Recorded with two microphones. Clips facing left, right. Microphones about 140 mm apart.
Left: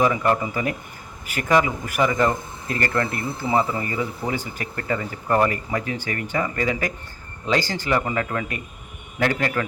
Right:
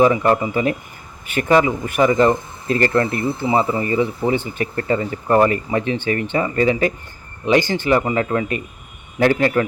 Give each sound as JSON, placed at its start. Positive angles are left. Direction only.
{"t": 0.0, "sound": "a man's voice", "side_deg": -25}